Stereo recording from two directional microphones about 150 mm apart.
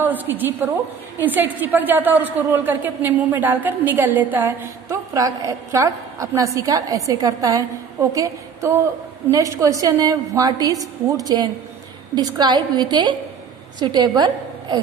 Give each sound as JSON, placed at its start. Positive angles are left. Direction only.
{"t": 0.0, "sound": "a woman's voice", "side_deg": -10}